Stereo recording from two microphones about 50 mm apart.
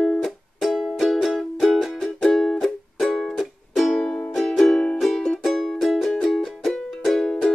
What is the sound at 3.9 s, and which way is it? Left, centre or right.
Music, left.